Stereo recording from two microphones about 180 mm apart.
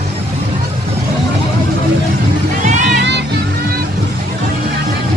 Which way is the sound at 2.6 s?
45° right (ahead or behind).